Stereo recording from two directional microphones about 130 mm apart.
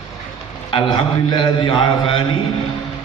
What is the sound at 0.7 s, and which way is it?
A man's voice, 35° left (ahead or behind).